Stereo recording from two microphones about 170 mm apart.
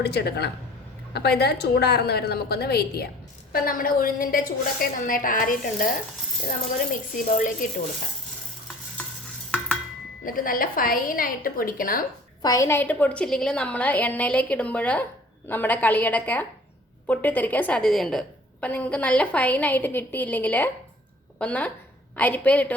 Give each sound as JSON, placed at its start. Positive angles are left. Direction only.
{"t": 0.0, "sound": "a woman's voice", "side_deg": 75}
{"t": 3.5, "sound": "a woman's voice", "side_deg": 55}
{"t": 7.3, "sound": "speech", "side_deg": 50}
{"t": 10.2, "sound": "a woman's voice", "side_deg": 55}
{"t": 12.4, "sound": "a woman's voice", "side_deg": 20}